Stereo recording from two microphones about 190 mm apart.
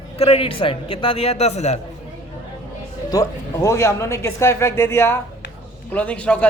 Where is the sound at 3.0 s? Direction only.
20° left (ahead or behind).